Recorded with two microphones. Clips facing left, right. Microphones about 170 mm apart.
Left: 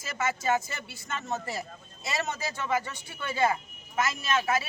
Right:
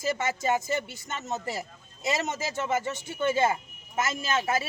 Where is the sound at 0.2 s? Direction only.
20° right (ahead or behind).